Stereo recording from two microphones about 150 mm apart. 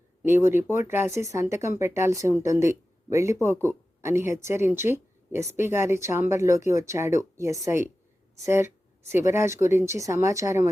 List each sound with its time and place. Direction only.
0.3 s speech: 15° right (ahead or behind)